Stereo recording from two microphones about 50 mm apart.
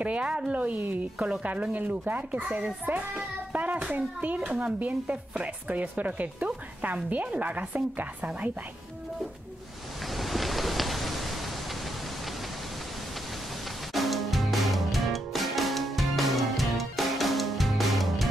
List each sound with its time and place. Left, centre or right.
0.0 s a woman's voice: right
3.5 s hands: right
3.9 s a woman's voice: right
10.1 s a sound: centre
13.9 s music: centre